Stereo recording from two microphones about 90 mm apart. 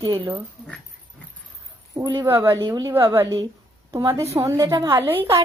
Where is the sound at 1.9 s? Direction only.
35° right (ahead or behind).